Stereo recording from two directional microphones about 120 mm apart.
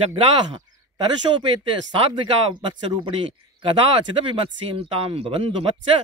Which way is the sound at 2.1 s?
40° right (ahead or behind).